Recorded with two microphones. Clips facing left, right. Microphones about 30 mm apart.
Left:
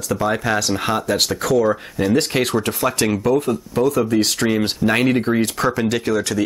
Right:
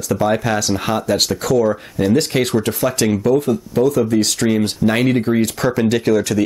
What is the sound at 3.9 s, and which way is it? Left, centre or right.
Speech, centre.